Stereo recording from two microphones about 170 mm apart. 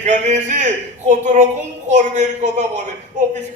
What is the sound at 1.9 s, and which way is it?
Speech, 45° right (ahead or behind).